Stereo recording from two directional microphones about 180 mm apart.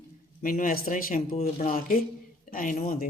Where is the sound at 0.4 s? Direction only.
50° left (ahead or behind).